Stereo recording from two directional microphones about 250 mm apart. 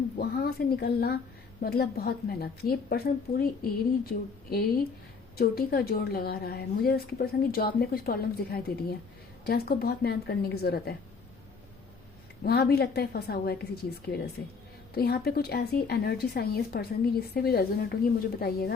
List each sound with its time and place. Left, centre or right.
0.2 s speech: left
12.5 s speech: left